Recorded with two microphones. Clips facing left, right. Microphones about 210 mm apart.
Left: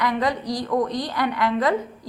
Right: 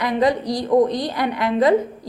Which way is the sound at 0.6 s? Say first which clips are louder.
Right 8 dB; 25° right (ahead or behind).